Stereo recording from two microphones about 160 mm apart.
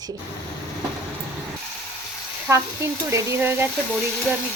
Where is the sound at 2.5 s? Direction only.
15° right (ahead or behind).